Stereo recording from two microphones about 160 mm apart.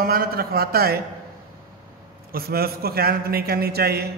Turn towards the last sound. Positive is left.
turn(degrees=-80)